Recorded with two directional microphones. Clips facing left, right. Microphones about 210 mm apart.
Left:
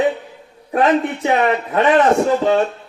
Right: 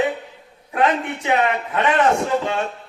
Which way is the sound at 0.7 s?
40° left (ahead or behind).